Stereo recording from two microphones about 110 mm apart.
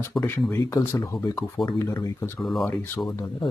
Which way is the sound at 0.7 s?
30° left (ahead or behind).